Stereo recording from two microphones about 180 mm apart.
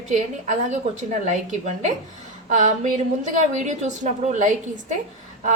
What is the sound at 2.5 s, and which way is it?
A woman's voice, 45° right (ahead or behind).